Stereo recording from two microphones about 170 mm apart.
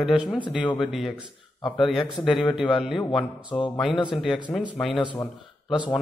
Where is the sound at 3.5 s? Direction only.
25° left (ahead or behind).